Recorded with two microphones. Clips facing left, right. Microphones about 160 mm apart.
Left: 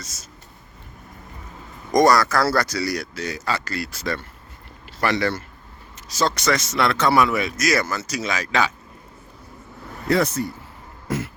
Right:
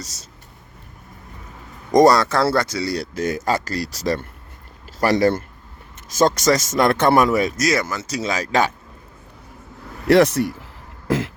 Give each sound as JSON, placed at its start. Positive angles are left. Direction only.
{"t": 1.9, "sound": "speech", "side_deg": -30}
{"t": 3.2, "sound": "speech", "side_deg": -50}
{"t": 7.7, "sound": "speech", "side_deg": -20}
{"t": 8.0, "sound": "speech", "side_deg": -30}
{"t": 10.1, "sound": "speech", "side_deg": -75}